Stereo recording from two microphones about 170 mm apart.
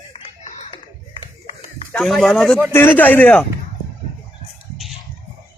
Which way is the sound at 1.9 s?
Centre (ahead or behind).